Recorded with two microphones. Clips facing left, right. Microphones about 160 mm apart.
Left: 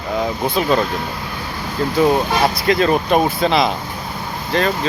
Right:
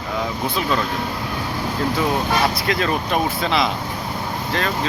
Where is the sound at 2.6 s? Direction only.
35° left (ahead or behind).